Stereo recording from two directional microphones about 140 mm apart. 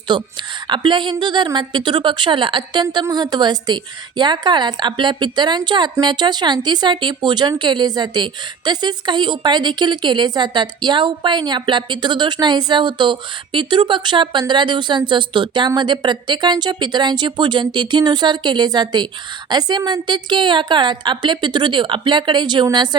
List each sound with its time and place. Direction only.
0.1 s a woman's voice: 35° right (ahead or behind)